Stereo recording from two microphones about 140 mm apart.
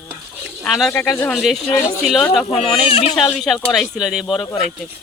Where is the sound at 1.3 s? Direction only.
Centre (ahead or behind).